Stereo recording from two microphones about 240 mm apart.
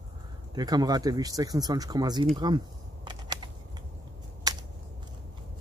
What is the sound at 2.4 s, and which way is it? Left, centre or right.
Typing, centre.